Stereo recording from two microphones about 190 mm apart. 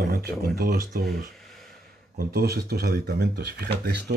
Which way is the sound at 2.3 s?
55° right (ahead or behind).